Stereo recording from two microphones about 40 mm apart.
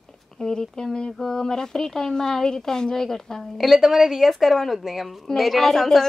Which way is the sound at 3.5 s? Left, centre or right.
Centre.